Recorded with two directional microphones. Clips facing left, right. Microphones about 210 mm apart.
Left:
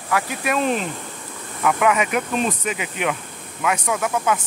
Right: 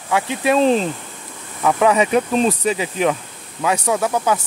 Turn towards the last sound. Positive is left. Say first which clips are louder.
# right 3 dB
turn(degrees=-35)  # may be behind; listen again after turning